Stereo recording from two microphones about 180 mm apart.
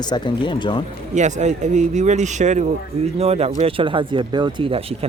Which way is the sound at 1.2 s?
40° right (ahead or behind).